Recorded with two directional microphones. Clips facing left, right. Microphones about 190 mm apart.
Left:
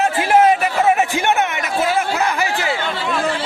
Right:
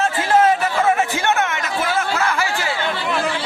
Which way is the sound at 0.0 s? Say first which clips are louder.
Left 2 dB; 15° left (ahead or behind).